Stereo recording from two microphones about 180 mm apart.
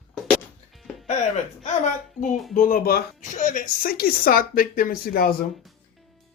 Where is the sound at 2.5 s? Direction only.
45° left (ahead or behind).